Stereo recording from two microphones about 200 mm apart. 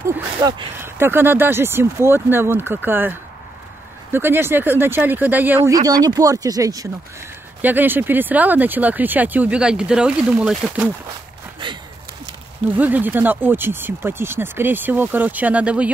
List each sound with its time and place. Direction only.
0.4 s speech: 20° right (ahead or behind)
0.7 s speech: 10° right (ahead or behind)
11.6 s a sound: 25° right (ahead or behind)
12.7 s speech: 10° right (ahead or behind)